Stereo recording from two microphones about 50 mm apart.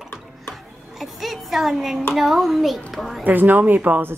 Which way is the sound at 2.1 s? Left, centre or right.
Centre.